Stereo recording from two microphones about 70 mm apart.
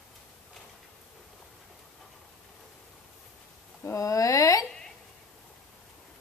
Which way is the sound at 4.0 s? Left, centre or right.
Left.